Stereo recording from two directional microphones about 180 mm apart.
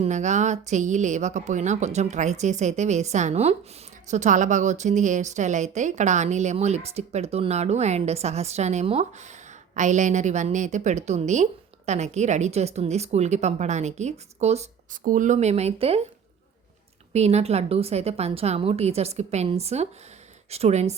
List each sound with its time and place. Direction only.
0.0 s a woman's voice: 40° right (ahead or behind)
17.1 s a woman's voice: 35° right (ahead or behind)